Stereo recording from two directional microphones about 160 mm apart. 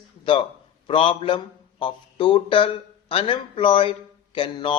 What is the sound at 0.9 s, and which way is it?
Speech, 35° left (ahead or behind).